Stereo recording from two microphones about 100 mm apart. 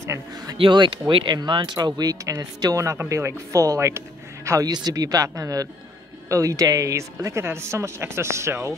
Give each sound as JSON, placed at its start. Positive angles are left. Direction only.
{"t": 0.0, "sound": "speech", "side_deg": -30}
{"t": 0.6, "sound": "speech", "side_deg": -55}